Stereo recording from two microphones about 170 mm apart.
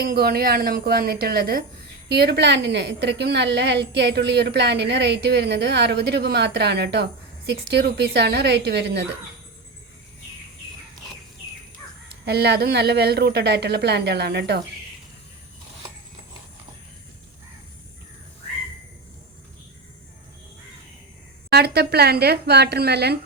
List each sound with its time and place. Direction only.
0.0 s a woman's voice: 60° right (ahead or behind)
2.0 s a woman's voice: 75° right (ahead or behind)
12.2 s a woman's voice: 75° right (ahead or behind)
21.5 s a woman's voice: 70° right (ahead or behind)